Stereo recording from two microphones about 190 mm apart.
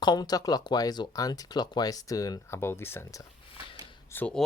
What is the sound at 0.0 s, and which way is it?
Speech, 20° left (ahead or behind).